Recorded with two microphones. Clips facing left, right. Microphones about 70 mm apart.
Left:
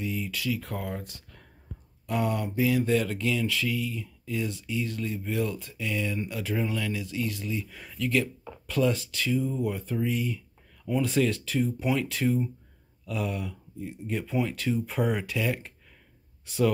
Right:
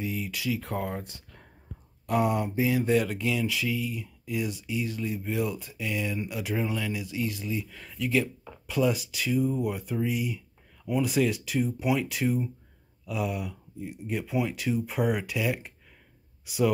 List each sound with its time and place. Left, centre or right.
0.0 s speech: right
7.7 s speech: centre
8.0 s speech: centre